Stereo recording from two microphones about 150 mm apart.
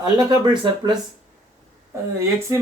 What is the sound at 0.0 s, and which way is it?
Speech, 30° right (ahead or behind).